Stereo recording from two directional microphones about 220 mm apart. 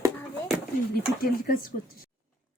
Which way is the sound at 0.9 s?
45° left (ahead or behind).